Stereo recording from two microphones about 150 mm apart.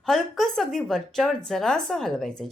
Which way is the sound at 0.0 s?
Centre (ahead or behind).